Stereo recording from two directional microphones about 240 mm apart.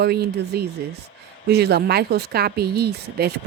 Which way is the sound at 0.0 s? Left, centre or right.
Right.